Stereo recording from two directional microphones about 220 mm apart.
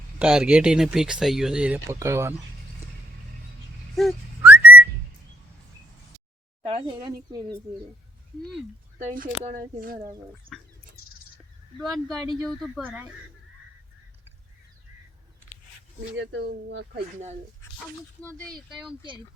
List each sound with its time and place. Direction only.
0.2 s speech: 5° right (ahead or behind)
3.9 s whistling: 5° right (ahead or behind)
6.7 s speech: 20° right (ahead or behind)
9.0 s speech: 35° right (ahead or behind)
11.8 s speech: centre (ahead or behind)
16.1 s speech: 55° right (ahead or behind)
18.2 s speech: 10° left (ahead or behind)
18.7 s speech: centre (ahead or behind)